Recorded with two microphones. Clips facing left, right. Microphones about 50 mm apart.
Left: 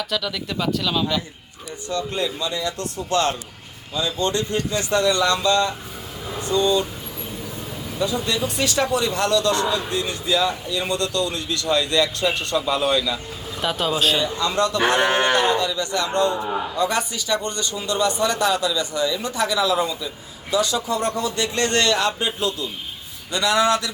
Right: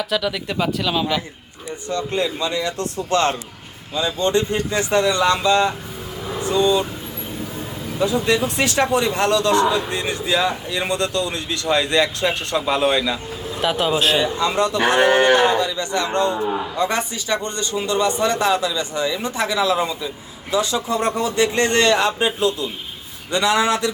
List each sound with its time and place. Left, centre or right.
0.0 s speech: centre
1.9 s a man's voice: right
8.3 s a man's voice: right
13.6 s speech: centre
14.2 s a man's voice: right